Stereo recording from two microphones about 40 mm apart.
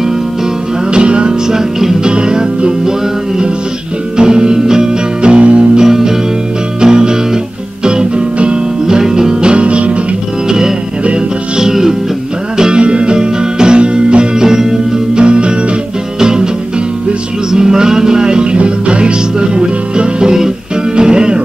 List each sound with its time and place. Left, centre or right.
0.9 s music: right
1.5 s music: centre
2.0 s music: right
4.2 s music: centre
5.9 s music: centre; by 9.9 s right
11.5 s music: centre
17.5 s music: centre